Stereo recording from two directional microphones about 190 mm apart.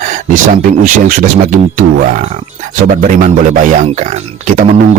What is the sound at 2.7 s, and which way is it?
Speech, 45° right (ahead or behind).